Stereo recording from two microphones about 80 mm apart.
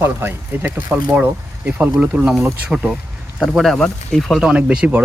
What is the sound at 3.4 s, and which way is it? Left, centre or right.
Speech, centre.